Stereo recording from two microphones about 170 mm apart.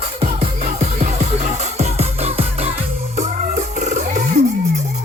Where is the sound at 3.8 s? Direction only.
45° right (ahead or behind).